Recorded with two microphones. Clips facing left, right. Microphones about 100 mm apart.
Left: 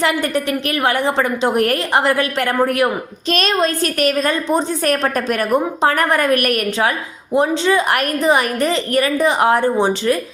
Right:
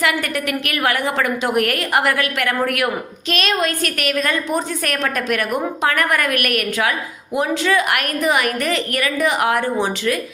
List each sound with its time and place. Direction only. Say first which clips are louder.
0.0 s a woman's voice: left 3 dB; 30° left (ahead or behind)